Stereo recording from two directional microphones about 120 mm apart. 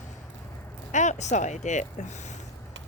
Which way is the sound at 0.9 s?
85° left.